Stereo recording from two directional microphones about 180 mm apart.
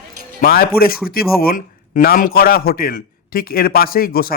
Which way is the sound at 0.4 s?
55° left (ahead or behind).